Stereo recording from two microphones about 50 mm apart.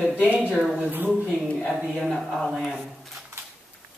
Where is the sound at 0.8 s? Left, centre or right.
Right.